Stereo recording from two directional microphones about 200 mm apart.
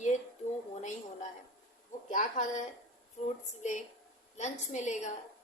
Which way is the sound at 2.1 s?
40° left (ahead or behind).